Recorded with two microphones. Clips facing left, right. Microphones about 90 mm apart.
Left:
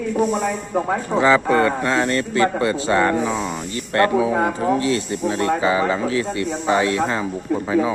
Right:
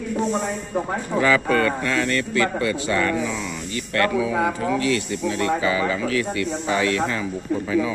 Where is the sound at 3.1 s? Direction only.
40° left (ahead or behind).